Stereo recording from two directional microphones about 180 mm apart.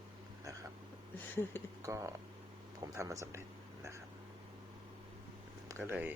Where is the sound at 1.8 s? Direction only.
15° right (ahead or behind).